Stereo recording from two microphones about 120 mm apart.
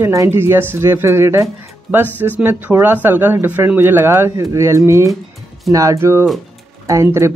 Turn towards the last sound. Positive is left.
turn(degrees=-25)  # may be behind; listen again after turning